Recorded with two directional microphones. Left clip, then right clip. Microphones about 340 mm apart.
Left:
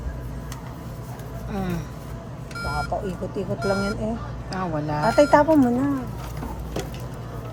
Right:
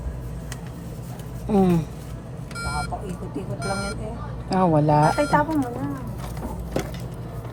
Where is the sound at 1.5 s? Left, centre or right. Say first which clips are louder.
Right 10 dB; centre.